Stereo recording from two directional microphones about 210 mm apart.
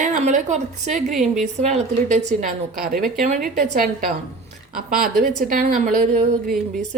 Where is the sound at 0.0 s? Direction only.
35° right (ahead or behind).